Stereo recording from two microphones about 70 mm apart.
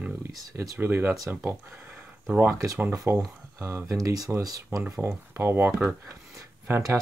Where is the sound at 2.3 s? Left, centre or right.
Right.